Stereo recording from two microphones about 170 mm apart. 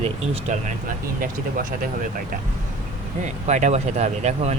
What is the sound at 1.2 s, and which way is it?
Speech, 55° right (ahead or behind).